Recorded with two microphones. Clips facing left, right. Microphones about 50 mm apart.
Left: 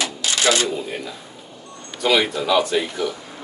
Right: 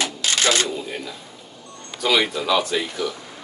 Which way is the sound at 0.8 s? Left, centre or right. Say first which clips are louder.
Left 2 dB; centre.